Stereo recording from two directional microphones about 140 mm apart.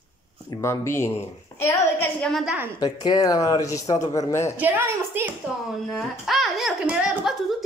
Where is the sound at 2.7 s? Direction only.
30° left (ahead or behind).